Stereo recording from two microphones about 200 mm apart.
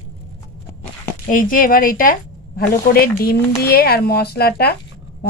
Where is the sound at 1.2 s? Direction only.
45° left (ahead or behind).